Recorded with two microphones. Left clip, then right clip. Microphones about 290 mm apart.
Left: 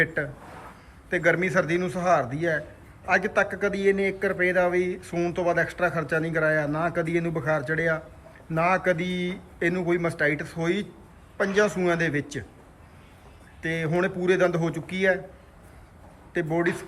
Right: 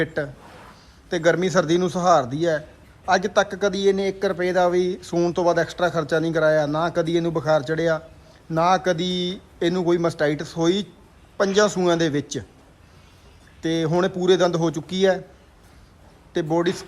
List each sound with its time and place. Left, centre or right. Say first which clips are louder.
0.0 s a man's voice: even; centre
13.6 s a man's voice: right 4 dB; centre
16.3 s a man's voice: right 3 dB; centre